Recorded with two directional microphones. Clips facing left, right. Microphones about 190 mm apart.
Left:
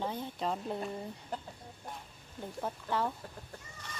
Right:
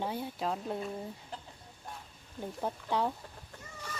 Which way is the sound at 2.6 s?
15° right (ahead or behind).